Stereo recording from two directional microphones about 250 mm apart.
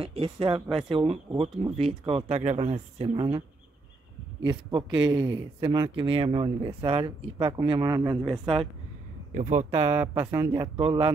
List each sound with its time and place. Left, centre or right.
0.0 s speech: right
4.5 s speech: centre
9.3 s speech: right
10.2 s speech: centre